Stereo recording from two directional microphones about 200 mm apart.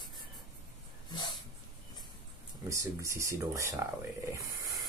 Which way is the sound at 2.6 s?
15° right (ahead or behind).